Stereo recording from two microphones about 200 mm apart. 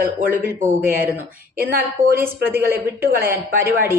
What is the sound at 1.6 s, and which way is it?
Speech, 45° right (ahead or behind).